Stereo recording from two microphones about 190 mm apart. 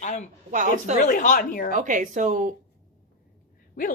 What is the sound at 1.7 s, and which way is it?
Speech, 40° right (ahead or behind).